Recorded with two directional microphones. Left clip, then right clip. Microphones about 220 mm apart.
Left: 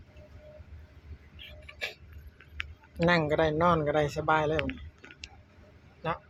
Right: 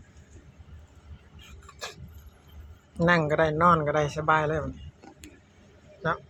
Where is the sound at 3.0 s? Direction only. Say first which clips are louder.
Right 3 dB; 5° left (ahead or behind).